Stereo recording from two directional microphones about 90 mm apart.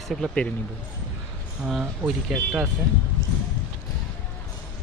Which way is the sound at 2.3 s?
20° right (ahead or behind).